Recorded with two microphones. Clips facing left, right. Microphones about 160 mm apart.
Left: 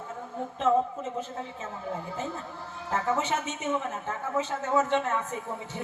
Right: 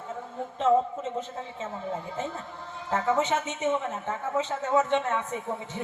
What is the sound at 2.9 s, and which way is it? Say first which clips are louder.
Speech: right 3 dB; 20° right (ahead or behind).